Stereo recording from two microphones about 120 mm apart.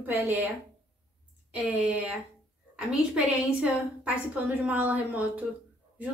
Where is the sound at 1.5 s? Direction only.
5° right (ahead or behind).